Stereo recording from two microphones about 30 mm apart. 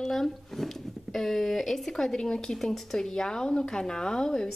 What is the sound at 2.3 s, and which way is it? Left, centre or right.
Speech, left.